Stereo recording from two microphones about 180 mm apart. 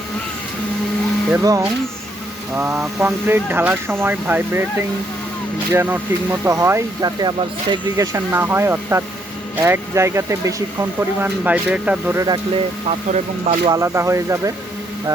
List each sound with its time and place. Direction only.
1.3 s speech: 20° right (ahead or behind)
5.7 s speech: 10° right (ahead or behind)
12.9 s speech: 40° right (ahead or behind)
13.7 s speech: 15° right (ahead or behind)